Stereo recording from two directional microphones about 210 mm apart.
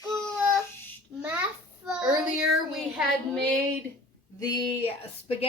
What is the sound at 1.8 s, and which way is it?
Child singing, 5° right (ahead or behind).